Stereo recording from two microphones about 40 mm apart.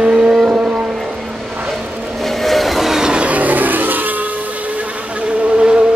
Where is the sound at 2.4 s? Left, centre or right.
Centre.